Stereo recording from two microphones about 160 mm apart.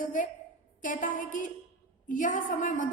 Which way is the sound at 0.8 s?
55° left (ahead or behind).